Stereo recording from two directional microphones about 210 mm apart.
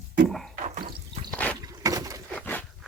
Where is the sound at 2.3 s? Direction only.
10° left (ahead or behind).